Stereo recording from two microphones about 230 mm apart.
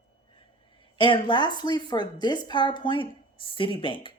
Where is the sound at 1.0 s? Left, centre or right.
Left.